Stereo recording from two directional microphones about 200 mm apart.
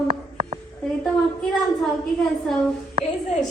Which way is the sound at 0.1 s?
30° right (ahead or behind).